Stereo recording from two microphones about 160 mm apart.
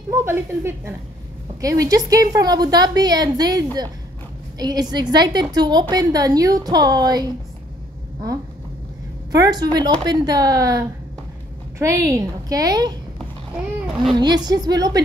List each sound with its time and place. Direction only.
0.1 s a woman's voice: 15° right (ahead or behind)
9.3 s a woman's voice: 25° right (ahead or behind)
14.1 s a woman's voice: 25° right (ahead or behind)